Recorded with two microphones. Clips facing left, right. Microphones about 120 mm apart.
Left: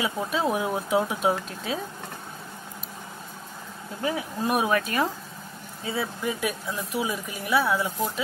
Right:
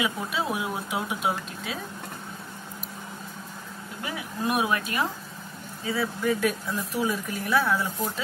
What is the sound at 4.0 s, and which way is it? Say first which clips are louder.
Speech: left 4 dB; 35° left (ahead or behind).